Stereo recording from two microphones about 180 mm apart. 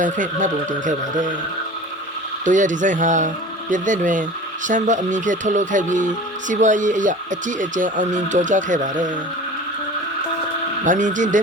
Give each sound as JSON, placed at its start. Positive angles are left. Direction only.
{"t": 0.0, "sound": "speech", "side_deg": -45}
{"t": 2.4, "sound": "speech", "side_deg": -45}
{"t": 10.8, "sound": "speech", "side_deg": -45}